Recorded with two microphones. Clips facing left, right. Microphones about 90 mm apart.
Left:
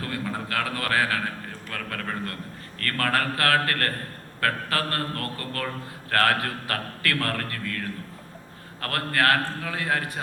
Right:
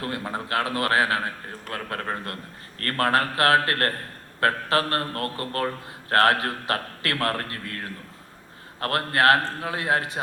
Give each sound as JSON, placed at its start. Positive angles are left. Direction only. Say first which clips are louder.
{"t": 0.0, "sound": "a man's voice", "louder": "right 1 dB", "side_deg": -25}